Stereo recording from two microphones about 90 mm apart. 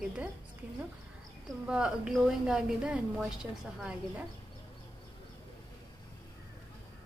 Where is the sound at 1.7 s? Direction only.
10° right (ahead or behind).